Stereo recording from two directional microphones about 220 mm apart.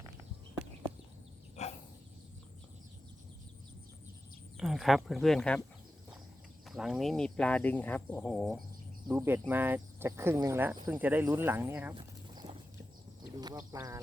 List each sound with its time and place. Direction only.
1.6 s a sound: 30° left (ahead or behind)
4.5 s speech: centre (ahead or behind)
6.7 s speech: centre (ahead or behind)
9.0 s speech: 10° right (ahead or behind)
11.9 s horse: 20° right (ahead or behind)
13.3 s speech: 15° right (ahead or behind)